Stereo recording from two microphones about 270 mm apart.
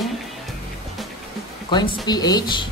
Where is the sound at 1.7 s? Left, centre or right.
Centre.